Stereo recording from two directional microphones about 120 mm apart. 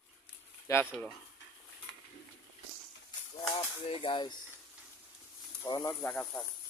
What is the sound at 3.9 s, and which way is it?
Speech, 50° left (ahead or behind).